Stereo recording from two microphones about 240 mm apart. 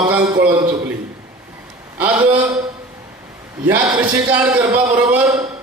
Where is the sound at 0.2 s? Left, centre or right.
Centre.